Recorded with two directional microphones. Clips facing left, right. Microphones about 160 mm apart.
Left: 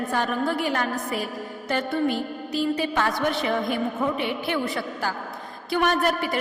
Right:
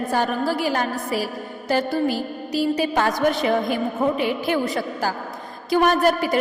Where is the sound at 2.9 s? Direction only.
40° right (ahead or behind).